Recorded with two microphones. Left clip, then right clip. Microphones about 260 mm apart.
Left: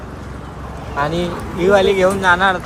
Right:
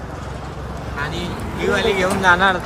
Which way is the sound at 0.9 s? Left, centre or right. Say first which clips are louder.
Left 7 dB; centre.